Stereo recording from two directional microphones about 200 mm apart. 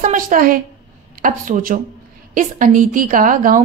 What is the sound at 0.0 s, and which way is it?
A woman's voice, 40° right (ahead or behind).